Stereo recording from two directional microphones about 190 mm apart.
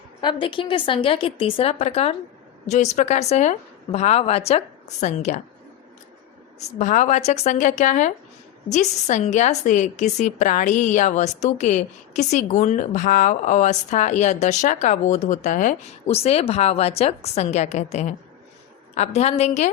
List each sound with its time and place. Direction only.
0.2 s a woman's voice: 25° left (ahead or behind)
6.6 s a woman's voice: 35° left (ahead or behind)